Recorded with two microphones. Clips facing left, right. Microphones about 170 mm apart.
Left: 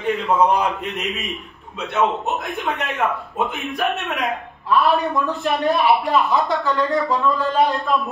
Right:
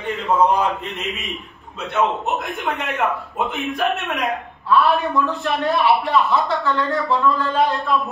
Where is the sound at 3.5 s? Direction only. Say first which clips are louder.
Right 2 dB; centre (ahead or behind).